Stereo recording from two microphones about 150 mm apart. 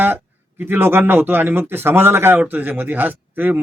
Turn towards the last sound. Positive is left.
turn(degrees=-10)  # may be behind; listen again after turning